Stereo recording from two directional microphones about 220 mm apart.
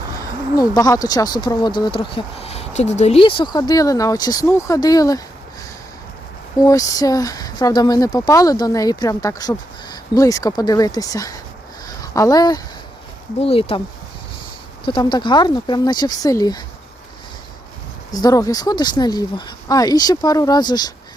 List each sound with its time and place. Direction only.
0.2 s speech: 15° left (ahead or behind)
6.7 s speech: 15° left (ahead or behind)
11.9 s a sound: 15° left (ahead or behind)
13.4 s speech: 25° left (ahead or behind)
14.8 s speech: 20° left (ahead or behind)
18.1 s speech: 15° left (ahead or behind)